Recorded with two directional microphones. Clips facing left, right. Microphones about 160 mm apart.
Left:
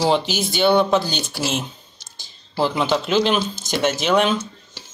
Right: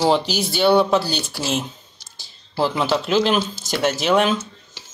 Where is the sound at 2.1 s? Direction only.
5° right (ahead or behind).